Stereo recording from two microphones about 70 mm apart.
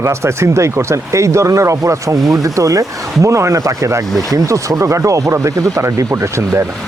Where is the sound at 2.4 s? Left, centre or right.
Right.